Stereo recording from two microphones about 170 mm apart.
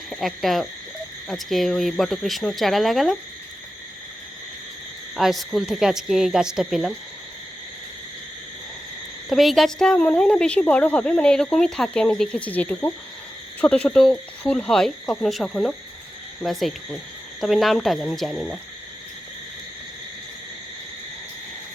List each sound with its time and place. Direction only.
0.1 s a woman's voice: centre (ahead or behind)
5.1 s a woman's voice: centre (ahead or behind)
9.3 s a woman's voice: centre (ahead or behind)